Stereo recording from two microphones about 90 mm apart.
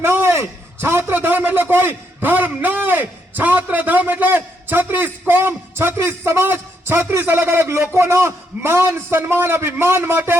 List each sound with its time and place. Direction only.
0.0 s a man's voice: 25° right (ahead or behind)